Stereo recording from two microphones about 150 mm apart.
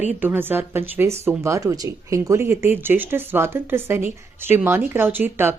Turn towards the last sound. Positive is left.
turn(degrees=-15)  # may be behind; listen again after turning